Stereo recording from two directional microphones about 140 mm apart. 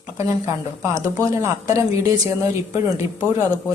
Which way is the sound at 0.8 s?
25° right (ahead or behind).